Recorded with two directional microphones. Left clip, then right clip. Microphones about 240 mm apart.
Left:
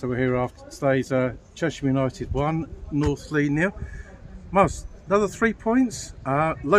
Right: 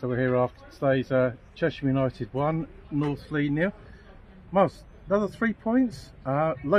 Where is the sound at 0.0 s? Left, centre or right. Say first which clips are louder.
Even; right.